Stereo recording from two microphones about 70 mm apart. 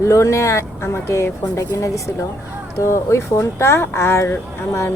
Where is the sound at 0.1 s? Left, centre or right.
Left.